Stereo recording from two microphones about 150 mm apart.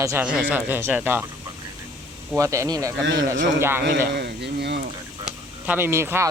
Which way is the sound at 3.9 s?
90° right.